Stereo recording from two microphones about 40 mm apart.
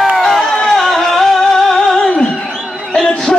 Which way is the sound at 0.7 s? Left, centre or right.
Centre.